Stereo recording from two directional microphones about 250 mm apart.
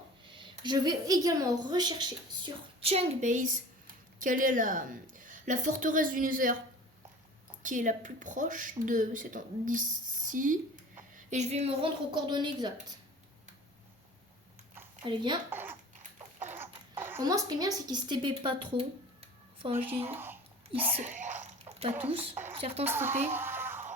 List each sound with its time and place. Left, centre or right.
0.3 s a woman's voice: centre
7.6 s a woman's voice: right
15.0 s a woman's voice: centre
20.0 s speech: centre
20.9 s whispering: right
22.5 s a woman's voice: right
22.9 s a woman's voice: centre
23.3 s music: centre